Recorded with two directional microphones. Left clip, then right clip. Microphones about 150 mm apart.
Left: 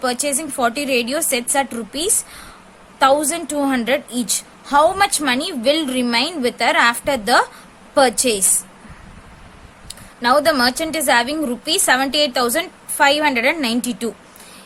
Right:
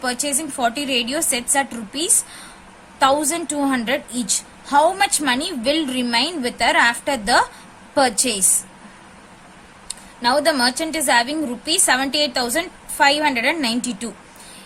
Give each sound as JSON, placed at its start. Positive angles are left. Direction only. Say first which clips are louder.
{"t": 0.0, "sound": "a woman's voice", "louder": "left 3 dB", "side_deg": 25}
{"t": 9.9, "sound": "a woman's voice", "louder": "left 3 dB", "side_deg": 25}